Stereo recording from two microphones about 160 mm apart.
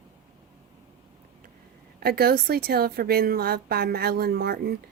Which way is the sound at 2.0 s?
75° right (ahead or behind).